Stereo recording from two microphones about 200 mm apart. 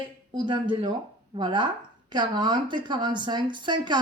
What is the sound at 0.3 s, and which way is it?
Speech, 25° right (ahead or behind).